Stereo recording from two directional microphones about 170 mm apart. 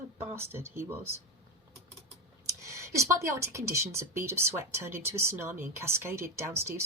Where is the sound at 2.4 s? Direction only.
15° right (ahead or behind).